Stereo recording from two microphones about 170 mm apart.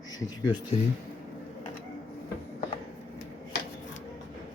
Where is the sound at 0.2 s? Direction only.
25° left (ahead or behind).